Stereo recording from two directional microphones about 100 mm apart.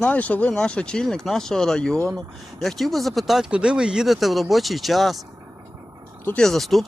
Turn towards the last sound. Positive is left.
turn(degrees=0)  # may be behind; listen again after turning